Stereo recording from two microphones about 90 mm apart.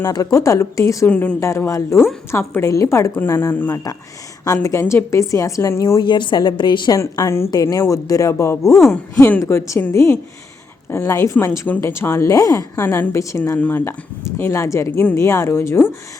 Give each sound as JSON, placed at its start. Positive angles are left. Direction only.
{"t": 0.1, "sound": "a woman's voice", "side_deg": 40}
{"t": 1.0, "sound": "speech", "side_deg": 20}
{"t": 1.4, "sound": "a woman's voice", "side_deg": 35}
{"t": 6.0, "sound": "a woman's voice", "side_deg": 60}
{"t": 6.9, "sound": "a woman's voice", "side_deg": 30}
{"t": 12.8, "sound": "a woman's voice", "side_deg": 25}
{"t": 13.6, "sound": "a woman's voice", "side_deg": 20}